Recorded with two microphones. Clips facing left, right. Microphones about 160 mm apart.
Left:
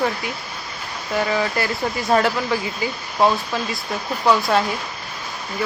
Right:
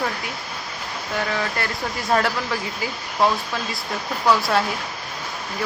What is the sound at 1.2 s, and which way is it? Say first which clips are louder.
Speech: left 4 dB; 5° left (ahead or behind).